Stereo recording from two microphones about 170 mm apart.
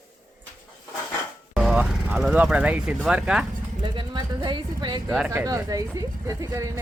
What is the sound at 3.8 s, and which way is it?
Speech, 25° right (ahead or behind).